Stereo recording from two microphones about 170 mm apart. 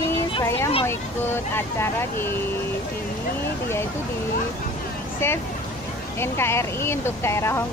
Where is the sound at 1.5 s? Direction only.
15° left (ahead or behind).